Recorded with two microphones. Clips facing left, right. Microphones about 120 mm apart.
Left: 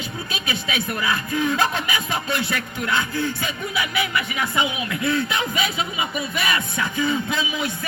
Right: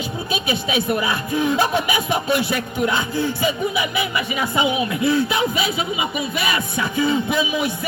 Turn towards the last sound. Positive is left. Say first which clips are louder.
# right 5 dB
turn(degrees=-15)  # may be behind; listen again after turning